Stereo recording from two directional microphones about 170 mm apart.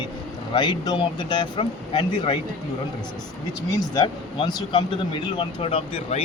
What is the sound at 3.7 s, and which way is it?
A man's voice, 25° left (ahead or behind).